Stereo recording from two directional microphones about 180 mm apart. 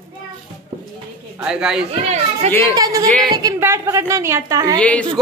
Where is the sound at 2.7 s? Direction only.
20° right (ahead or behind).